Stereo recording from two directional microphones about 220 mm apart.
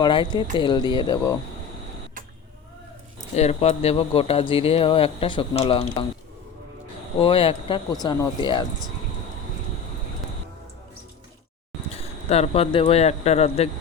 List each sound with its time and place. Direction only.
0.0 s speech: 20° left (ahead or behind)
3.3 s speech: 30° left (ahead or behind)
7.2 s speech: 25° left (ahead or behind)
11.9 s a man's voice: 30° left (ahead or behind)